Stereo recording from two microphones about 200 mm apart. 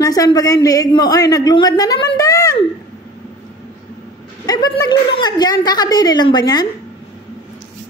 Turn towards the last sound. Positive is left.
turn(degrees=20)  # may be behind; listen again after turning